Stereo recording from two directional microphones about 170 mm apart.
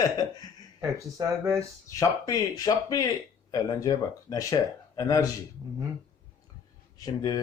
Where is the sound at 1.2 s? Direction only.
20° right (ahead or behind).